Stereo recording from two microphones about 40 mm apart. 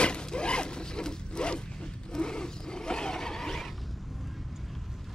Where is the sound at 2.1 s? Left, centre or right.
Centre.